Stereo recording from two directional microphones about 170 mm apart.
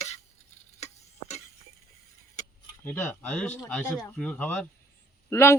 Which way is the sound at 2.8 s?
10° left (ahead or behind).